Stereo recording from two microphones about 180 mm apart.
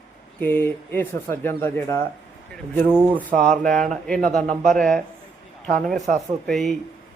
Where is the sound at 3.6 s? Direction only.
5° left (ahead or behind).